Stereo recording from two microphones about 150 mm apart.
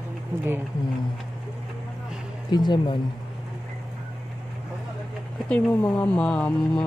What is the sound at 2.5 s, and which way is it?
Speech, 30° left (ahead or behind).